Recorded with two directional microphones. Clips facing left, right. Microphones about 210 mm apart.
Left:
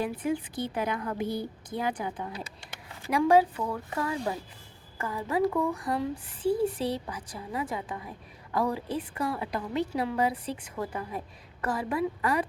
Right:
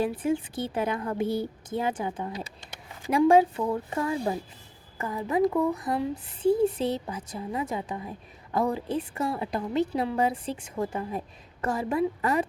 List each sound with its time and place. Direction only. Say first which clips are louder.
0.0 s a woman's voice: right 3 dB; 30° right (ahead or behind)